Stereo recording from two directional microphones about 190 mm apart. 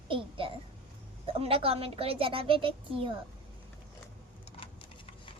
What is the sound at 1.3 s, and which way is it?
A child's voice, 30° right (ahead or behind).